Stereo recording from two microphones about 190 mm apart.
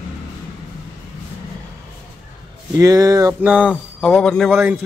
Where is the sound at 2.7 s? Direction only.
20° right (ahead or behind); by 4.5 s 5° left (ahead or behind).